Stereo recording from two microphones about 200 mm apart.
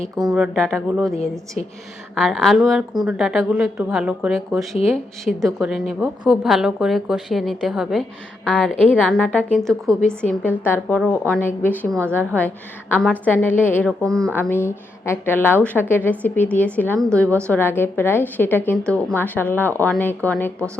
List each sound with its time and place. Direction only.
0.3 s a woman's voice: 5° right (ahead or behind)
1.1 s a woman's voice: 30° left (ahead or behind)
2.1 s a woman's voice: centre (ahead or behind)